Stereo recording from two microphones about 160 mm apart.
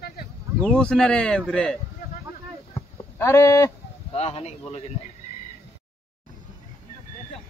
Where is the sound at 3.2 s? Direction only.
20° left (ahead or behind).